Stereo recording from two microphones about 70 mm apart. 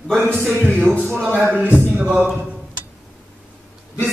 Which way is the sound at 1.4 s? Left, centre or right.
Centre.